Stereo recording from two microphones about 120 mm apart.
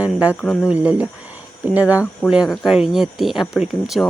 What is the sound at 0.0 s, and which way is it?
Speech, 10° right (ahead or behind).